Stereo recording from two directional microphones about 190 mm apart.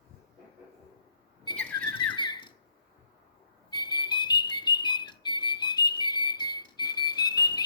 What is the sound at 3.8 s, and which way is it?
Music, 25° left (ahead or behind).